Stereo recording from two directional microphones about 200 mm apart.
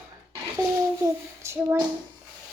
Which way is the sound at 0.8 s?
15° right (ahead or behind).